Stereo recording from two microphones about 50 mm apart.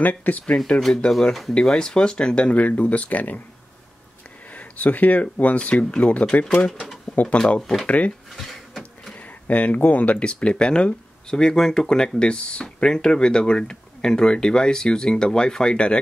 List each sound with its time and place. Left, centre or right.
0.0 s speech: left
0.7 s speech: centre; by 3.3 s left
4.5 s speech: left
7.3 s speech: left
8.3 s printer: centre
9.1 s speech: left